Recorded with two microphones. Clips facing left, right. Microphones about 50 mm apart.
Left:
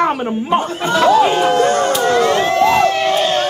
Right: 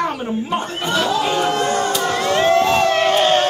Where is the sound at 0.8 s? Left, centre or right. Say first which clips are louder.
Left 7 dB; left.